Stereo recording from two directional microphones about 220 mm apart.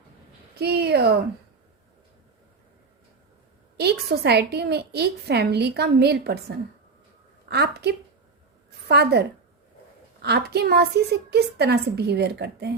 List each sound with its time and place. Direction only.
0.6 s a woman's voice: 45° right (ahead or behind)
3.8 s a woman's voice: 50° right (ahead or behind)
10.2 s a woman's voice: 45° right (ahead or behind)